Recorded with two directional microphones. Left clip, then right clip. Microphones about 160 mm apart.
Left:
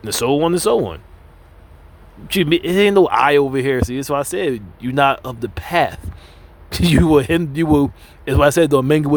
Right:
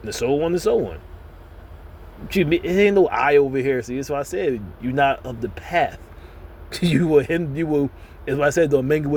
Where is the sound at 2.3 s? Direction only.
45° left (ahead or behind).